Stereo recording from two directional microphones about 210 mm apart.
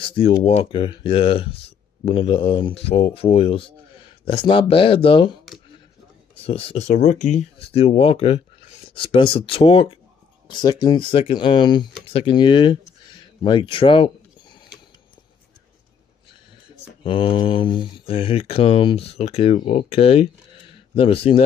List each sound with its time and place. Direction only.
0.0 s speech: 25° left (ahead or behind)
6.4 s speech: 30° left (ahead or behind)
17.0 s speech: 25° left (ahead or behind)